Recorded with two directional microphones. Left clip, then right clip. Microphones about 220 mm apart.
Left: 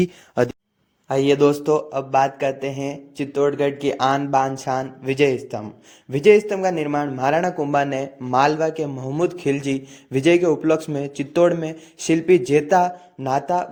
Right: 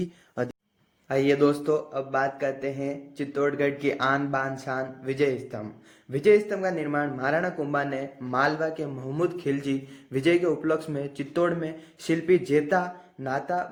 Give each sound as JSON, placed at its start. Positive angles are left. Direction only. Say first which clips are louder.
{"t": 0.0, "sound": "speech", "louder": "left 11 dB", "side_deg": 40}
{"t": 1.0, "sound": "a man's voice", "louder": "left 5 dB", "side_deg": 25}